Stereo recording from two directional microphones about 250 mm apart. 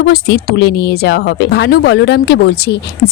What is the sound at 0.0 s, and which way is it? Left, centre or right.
Speech, left.